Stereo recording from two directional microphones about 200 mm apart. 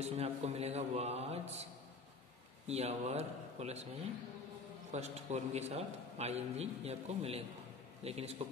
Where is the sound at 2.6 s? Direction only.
30° right (ahead or behind).